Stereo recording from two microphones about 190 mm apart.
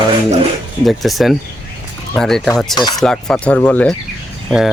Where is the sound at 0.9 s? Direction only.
Centre (ahead or behind).